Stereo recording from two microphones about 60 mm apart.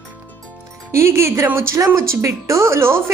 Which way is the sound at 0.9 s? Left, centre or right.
Right.